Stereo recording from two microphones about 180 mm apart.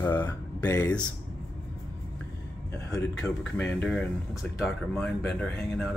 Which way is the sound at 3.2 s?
10° left (ahead or behind).